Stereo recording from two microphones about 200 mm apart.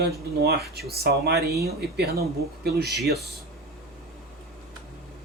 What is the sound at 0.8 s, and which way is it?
Speech, 50° right (ahead or behind).